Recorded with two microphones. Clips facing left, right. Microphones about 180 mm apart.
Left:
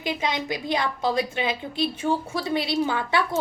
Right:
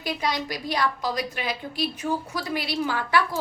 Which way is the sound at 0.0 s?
20° left (ahead or behind).